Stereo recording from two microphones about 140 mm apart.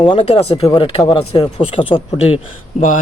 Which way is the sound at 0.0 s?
40° left (ahead or behind).